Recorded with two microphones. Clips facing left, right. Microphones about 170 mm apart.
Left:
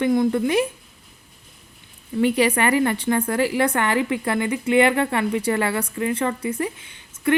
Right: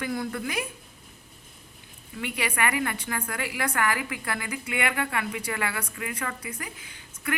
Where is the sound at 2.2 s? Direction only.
35° left (ahead or behind).